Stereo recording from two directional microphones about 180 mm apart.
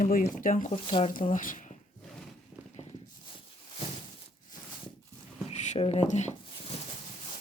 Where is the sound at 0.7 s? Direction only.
35° left (ahead or behind).